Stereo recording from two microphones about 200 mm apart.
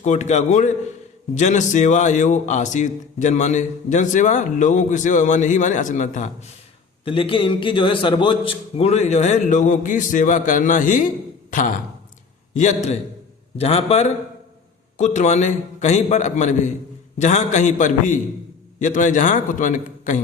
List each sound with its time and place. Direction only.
0.0 s a man's voice: 35° left (ahead or behind)
7.0 s a man's voice: 25° left (ahead or behind)
12.5 s a man's voice: 35° left (ahead or behind)